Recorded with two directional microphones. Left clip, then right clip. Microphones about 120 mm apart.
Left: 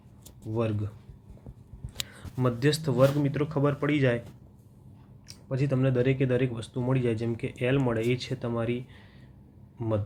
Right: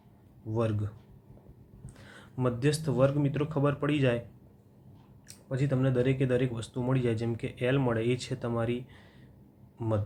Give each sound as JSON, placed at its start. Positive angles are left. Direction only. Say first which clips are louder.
{"t": 0.5, "sound": "speech", "louder": "left 1 dB", "side_deg": 25}
{"t": 5.3, "sound": "speech", "louder": "left 2 dB", "side_deg": 30}